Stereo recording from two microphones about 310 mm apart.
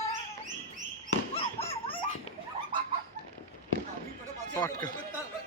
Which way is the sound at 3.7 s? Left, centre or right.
Left.